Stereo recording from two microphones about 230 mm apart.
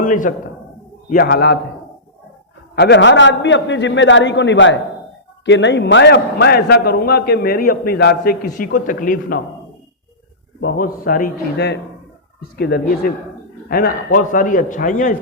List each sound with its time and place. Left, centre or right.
0.0 s a man's voice: left
2.7 s a man's voice: left
10.6 s a man's voice: left